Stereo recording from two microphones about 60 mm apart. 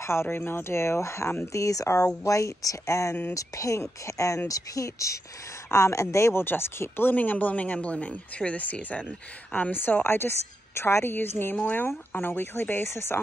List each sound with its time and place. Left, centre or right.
0.0 s a woman's voice: left
1.5 s speech: left
2.0 s speech: left
4.5 s a woman's voice: left
6.4 s speech: left
10.0 s a woman's voice: left
12.8 s a woman's voice: left